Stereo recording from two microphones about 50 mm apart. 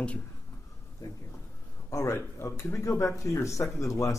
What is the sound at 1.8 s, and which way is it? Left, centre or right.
Speech, left.